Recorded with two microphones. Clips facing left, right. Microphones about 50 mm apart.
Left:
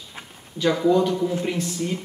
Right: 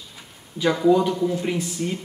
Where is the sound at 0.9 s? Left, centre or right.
Centre.